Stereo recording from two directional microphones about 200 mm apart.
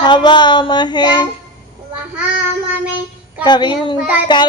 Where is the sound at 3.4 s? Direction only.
20° left (ahead or behind).